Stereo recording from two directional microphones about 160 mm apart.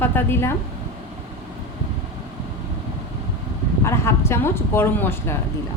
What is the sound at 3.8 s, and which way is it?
Speech, 15° left (ahead or behind).